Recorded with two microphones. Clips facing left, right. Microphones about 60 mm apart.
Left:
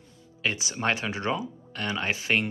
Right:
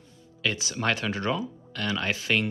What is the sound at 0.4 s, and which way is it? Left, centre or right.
Speech, left.